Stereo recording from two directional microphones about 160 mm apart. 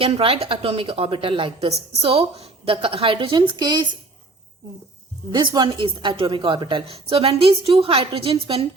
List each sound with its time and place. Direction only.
0.0 s a woman's voice: 35° right (ahead or behind)
5.3 s a woman's voice: 30° right (ahead or behind)